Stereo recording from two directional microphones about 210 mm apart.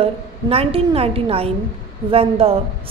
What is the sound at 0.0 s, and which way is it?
A woman's voice, 25° right (ahead or behind).